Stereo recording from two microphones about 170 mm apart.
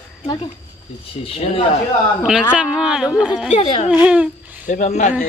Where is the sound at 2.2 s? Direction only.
5° right (ahead or behind).